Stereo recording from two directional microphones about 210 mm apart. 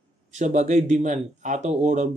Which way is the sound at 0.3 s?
35° right (ahead or behind).